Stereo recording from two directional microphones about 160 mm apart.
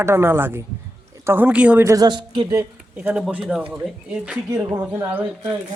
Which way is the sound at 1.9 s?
25° right (ahead or behind).